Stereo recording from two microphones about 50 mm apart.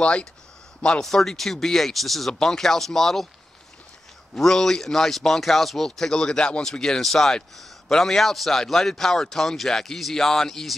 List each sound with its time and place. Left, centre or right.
0.0 s speech: left
1.0 s a man's voice: centre
4.4 s a man's voice: centre